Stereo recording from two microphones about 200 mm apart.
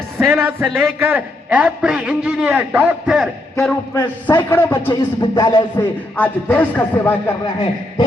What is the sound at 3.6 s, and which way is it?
Speech, 10° left (ahead or behind).